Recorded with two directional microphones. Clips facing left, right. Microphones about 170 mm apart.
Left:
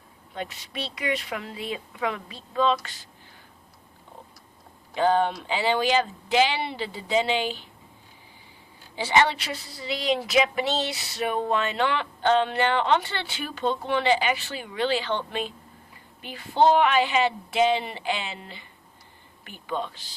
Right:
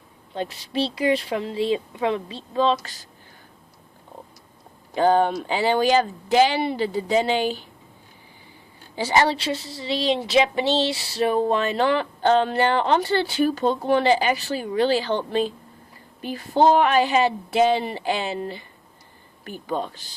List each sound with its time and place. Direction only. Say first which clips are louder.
0.3 s a woman's voice: right 8 dB; 30° right (ahead or behind)
4.9 s speech: right 4 dB; 45° right (ahead or behind)
9.0 s a woman's voice: right 2 dB; 40° right (ahead or behind)